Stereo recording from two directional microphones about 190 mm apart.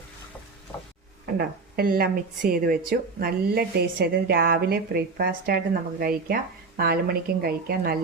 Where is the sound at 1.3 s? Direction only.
50° right (ahead or behind).